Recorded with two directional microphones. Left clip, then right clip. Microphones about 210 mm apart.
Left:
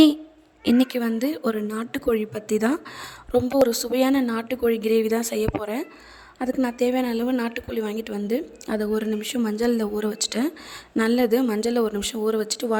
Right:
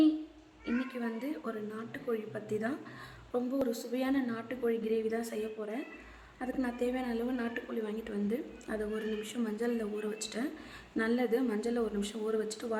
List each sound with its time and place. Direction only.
0.6 s a woman's voice: 50° left (ahead or behind)